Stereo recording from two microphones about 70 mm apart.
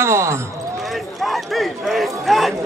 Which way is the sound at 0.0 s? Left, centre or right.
Right.